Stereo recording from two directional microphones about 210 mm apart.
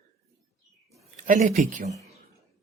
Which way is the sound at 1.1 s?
35° right (ahead or behind).